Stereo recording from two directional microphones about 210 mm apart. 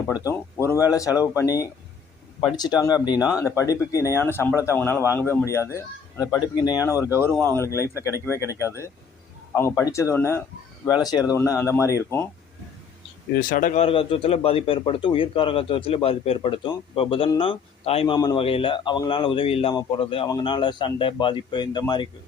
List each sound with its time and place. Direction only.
0.1 s speech: 10° left (ahead or behind)
13.3 s speech: 40° left (ahead or behind)
13.8 s speech: 25° left (ahead or behind)